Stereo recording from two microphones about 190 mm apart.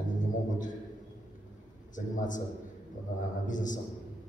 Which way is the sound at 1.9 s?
40° left (ahead or behind).